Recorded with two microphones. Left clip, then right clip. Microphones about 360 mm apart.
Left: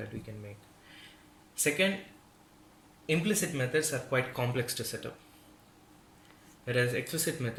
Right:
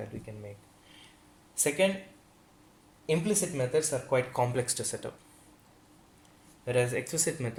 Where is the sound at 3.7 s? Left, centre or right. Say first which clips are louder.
Right 2 dB; centre.